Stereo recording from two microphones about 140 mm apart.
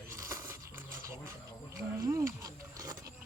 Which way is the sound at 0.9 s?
80° right.